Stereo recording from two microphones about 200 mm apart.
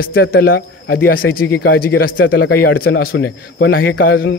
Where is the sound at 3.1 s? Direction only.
75° left (ahead or behind).